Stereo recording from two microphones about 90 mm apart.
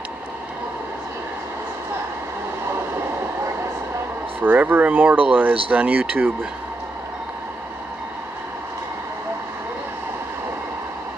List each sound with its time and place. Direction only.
4.4 s speech: 20° right (ahead or behind)